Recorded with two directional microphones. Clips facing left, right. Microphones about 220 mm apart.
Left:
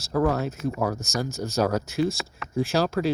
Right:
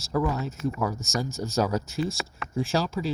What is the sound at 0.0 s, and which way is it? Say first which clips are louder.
Speech: left 4 dB; 70° left (ahead or behind).